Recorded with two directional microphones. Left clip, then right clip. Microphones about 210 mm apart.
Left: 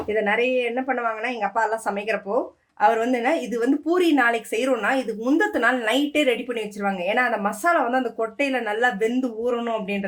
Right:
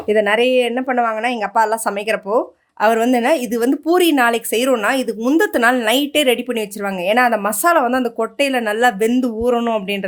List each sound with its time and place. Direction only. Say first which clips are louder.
0.1 s a woman's voice: right 7 dB; 50° right (ahead or behind)